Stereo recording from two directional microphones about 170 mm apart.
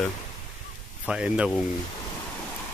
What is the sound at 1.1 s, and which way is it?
Speech, 5° right (ahead or behind).